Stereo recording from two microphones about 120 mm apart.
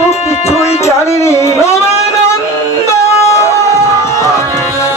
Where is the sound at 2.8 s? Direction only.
25° left (ahead or behind).